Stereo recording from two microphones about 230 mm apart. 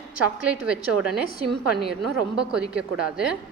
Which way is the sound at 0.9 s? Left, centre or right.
Right.